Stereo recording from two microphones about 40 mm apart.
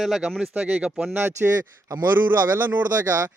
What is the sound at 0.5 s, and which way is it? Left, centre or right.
Speech, right.